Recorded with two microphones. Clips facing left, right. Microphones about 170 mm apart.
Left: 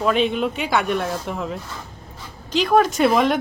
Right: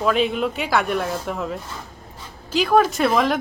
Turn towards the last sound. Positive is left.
turn(degrees=0)  # may be behind; listen again after turning